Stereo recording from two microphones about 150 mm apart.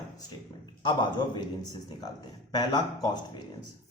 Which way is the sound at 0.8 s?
30° left (ahead or behind).